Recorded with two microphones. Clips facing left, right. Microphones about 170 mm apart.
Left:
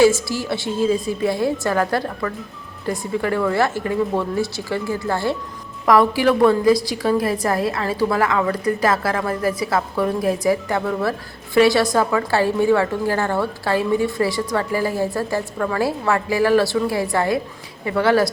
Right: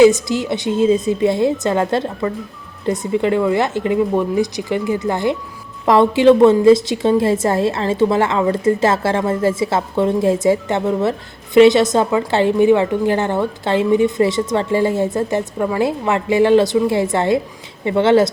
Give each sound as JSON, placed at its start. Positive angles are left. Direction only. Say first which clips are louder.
{"t": 0.0, "sound": "a woman's voice", "louder": "right 4 dB", "side_deg": -20}